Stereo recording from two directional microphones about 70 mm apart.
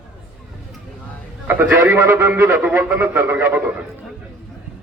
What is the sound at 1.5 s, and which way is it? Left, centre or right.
A man's voice, right.